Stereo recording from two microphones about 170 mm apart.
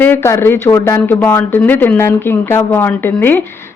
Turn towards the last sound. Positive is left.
turn(degrees=10)  # may be behind; listen again after turning